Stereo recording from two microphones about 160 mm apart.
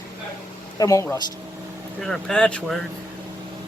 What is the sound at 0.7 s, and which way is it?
Speech, 20° left (ahead or behind).